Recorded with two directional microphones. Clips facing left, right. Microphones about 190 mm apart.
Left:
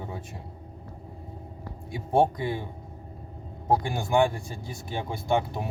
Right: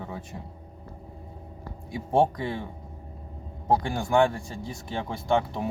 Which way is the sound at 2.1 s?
10° left (ahead or behind).